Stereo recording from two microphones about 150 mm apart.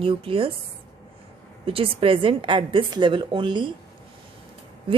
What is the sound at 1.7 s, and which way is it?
A woman's voice, 35° right (ahead or behind).